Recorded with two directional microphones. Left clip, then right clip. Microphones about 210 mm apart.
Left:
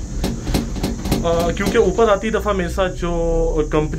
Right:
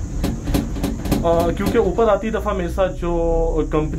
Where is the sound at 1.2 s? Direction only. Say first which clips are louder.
Right 1 dB; 10° right (ahead or behind).